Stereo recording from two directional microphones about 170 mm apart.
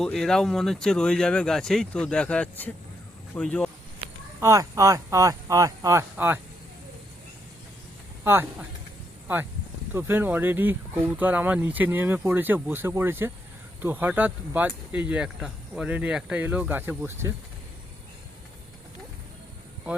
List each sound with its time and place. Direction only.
0.0 s speech: 5° left (ahead or behind)
4.4 s speech: 15° right (ahead or behind)
8.2 s speech: 15° right (ahead or behind)